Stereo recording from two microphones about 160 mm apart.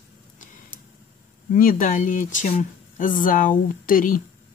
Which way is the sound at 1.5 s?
60° left (ahead or behind).